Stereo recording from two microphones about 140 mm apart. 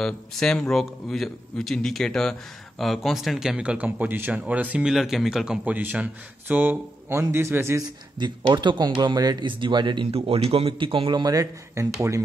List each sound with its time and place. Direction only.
0.0 s speech: 5° left (ahead or behind); by 7.8 s 20° right (ahead or behind)
8.2 s speech: 30° right (ahead or behind)